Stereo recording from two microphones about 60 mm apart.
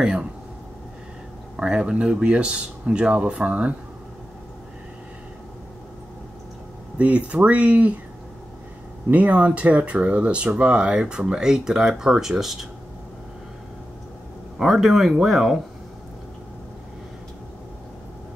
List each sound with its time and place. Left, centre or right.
0.0 s speech: centre
1.6 s speech: centre
7.0 s speech: right
9.1 s speech: right; by 12.5 s centre
14.6 s speech: centre